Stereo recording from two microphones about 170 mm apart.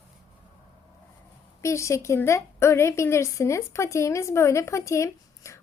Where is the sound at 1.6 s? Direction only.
15° left (ahead or behind).